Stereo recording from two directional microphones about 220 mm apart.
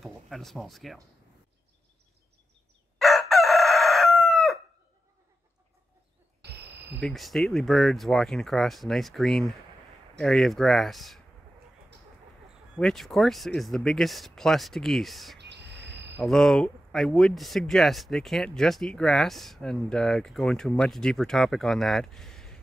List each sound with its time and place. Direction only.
0.0 s speech: centre (ahead or behind)
3.0 s chicken: centre (ahead or behind)
7.0 s speech: centre (ahead or behind)
12.7 s speech: centre (ahead or behind)
15.3 s a sound: 50° right (ahead or behind)
16.2 s speech: centre (ahead or behind)